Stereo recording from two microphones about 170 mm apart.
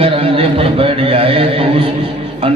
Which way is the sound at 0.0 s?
35° right (ahead or behind).